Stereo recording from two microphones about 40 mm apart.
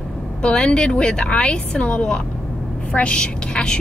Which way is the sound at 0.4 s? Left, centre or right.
Left.